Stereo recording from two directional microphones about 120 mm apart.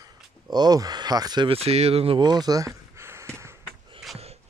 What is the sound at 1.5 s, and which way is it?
Speech, 60° right (ahead or behind).